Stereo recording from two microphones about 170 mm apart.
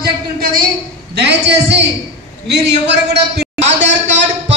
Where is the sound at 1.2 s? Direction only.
85° right.